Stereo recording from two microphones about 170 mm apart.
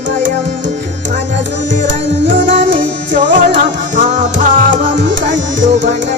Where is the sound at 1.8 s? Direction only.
90° right.